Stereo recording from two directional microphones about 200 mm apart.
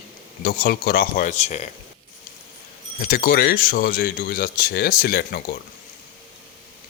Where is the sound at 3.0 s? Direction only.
45° left (ahead or behind).